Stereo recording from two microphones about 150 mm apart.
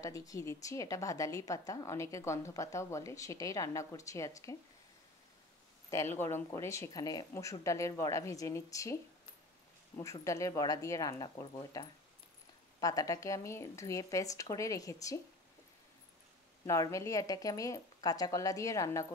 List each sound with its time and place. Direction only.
0.0 s a woman's voice: 20° left (ahead or behind)
5.9 s a woman's voice: 20° left (ahead or behind)
9.9 s a woman's voice: 20° left (ahead or behind)
16.6 s a woman's voice: 20° left (ahead or behind)